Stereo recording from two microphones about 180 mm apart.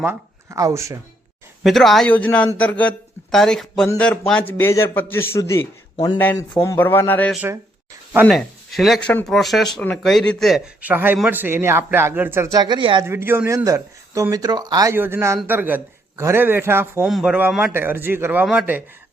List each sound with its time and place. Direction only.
0.0 s speech: 15° right (ahead or behind)
1.6 s speech: centre (ahead or behind); by 13.1 s 25° right (ahead or behind)
13.1 s speech: 15° right (ahead or behind)